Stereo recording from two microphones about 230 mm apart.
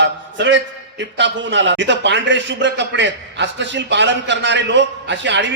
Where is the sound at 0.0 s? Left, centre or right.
Right.